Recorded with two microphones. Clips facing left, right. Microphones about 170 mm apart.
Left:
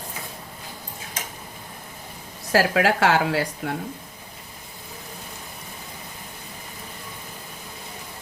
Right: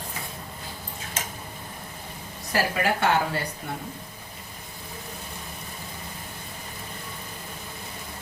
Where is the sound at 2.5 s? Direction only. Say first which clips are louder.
Left 5 dB; 90° left.